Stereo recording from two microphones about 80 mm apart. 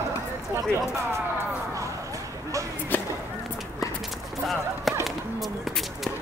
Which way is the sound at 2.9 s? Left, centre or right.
Left.